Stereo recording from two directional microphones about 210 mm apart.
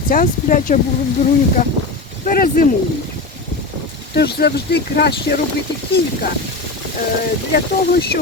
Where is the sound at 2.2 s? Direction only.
45° left (ahead or behind).